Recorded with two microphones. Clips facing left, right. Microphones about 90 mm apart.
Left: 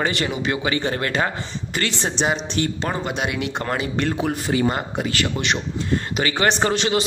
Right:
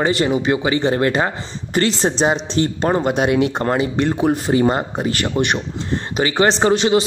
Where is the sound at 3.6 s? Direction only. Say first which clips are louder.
Right 5 dB; 25° right (ahead or behind).